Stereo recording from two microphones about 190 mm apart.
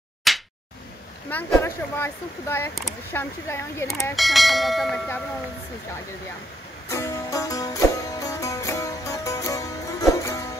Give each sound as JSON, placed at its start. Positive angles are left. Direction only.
{"t": 0.3, "sound": "a sound", "side_deg": 0}
{"t": 1.3, "sound": "speech", "side_deg": 10}
{"t": 4.1, "sound": "speech", "side_deg": 0}
{"t": 6.9, "sound": "music", "side_deg": 15}